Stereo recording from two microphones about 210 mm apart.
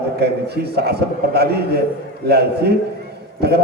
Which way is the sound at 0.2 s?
50° right (ahead or behind).